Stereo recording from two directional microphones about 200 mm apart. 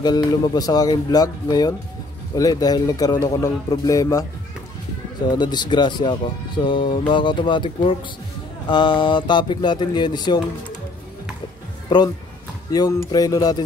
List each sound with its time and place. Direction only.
0.0 s speech: 20° left (ahead or behind)
5.3 s speech: 20° left (ahead or behind)
12.7 s speech: 20° left (ahead or behind)